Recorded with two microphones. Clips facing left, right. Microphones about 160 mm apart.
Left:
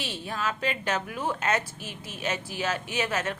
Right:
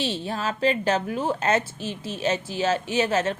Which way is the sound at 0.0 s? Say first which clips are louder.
Right 5 dB; 30° right (ahead or behind).